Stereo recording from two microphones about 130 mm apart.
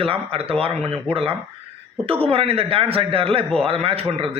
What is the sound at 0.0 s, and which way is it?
A man's voice, 45° right (ahead or behind).